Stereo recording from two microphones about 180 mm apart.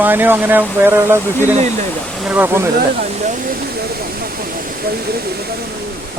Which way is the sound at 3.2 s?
50° right (ahead or behind).